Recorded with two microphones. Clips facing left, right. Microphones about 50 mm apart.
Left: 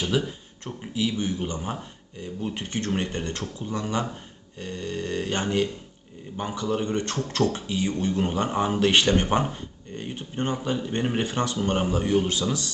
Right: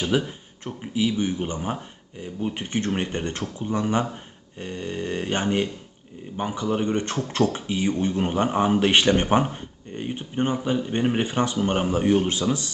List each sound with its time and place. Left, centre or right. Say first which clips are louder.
0.3 s speech: right 1 dB; centre